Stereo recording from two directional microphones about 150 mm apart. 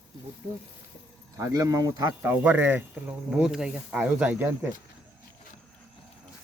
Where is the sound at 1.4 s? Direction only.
25° right (ahead or behind).